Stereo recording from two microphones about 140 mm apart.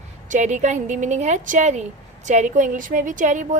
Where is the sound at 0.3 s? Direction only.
60° right (ahead or behind).